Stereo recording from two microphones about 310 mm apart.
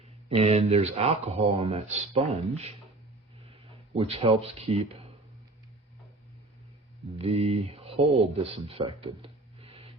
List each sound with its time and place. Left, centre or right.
0.0 s speech: centre
7.2 s speech: centre